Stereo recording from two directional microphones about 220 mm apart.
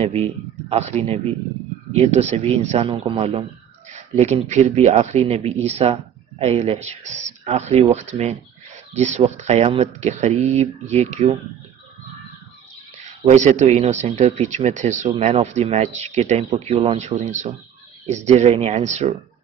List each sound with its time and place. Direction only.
0.0 s speech: 30° right (ahead or behind)
13.0 s speech: 30° right (ahead or behind)